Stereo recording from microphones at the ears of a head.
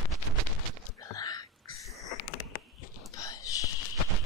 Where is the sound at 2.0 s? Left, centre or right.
Left.